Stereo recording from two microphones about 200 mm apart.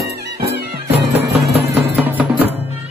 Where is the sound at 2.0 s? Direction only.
10° right (ahead or behind).